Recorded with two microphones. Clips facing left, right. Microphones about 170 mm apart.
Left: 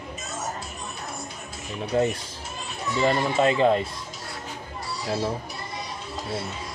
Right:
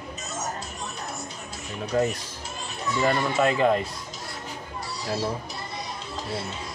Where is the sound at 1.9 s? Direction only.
25° left (ahead or behind).